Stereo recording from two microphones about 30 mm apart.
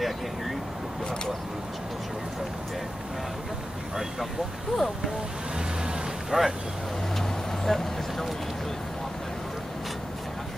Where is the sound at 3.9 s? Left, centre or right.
Centre.